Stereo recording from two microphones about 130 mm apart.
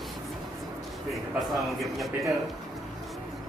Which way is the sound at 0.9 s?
Centre (ahead or behind).